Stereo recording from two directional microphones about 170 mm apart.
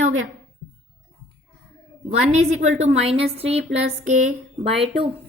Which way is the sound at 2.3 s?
40° right (ahead or behind).